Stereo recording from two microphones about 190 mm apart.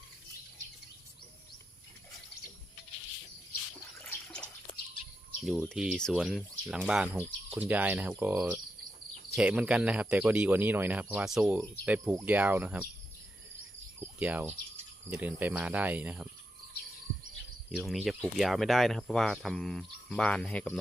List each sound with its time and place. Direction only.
5.5 s speech: centre (ahead or behind)
14.0 s cricket: 10° right (ahead or behind)
15.1 s speech: 10° right (ahead or behind)
17.7 s speech: centre (ahead or behind)